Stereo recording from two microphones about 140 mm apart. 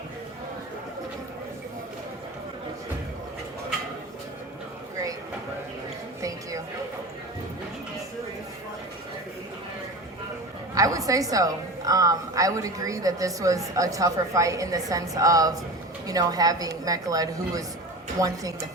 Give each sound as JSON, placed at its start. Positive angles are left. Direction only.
{"t": 10.8, "sound": "a woman's voice", "side_deg": -25}